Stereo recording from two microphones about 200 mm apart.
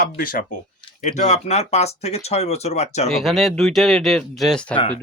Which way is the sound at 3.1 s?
Centre (ahead or behind).